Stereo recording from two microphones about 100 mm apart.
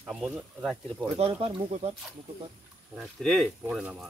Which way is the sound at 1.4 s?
75° right (ahead or behind).